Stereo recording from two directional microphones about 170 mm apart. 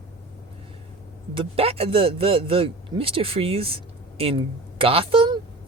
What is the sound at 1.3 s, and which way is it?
Speech, 35° right (ahead or behind).